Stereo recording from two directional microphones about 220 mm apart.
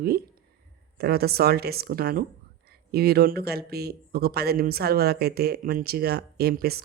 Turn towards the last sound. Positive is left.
turn(degrees=-45)  # may be behind; listen again after turning